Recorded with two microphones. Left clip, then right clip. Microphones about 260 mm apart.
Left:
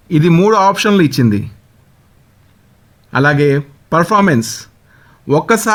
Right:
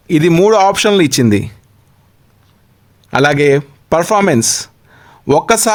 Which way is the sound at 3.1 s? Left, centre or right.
Right.